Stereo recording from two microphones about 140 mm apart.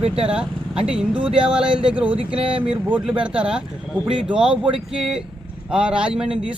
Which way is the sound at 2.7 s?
10° right (ahead or behind).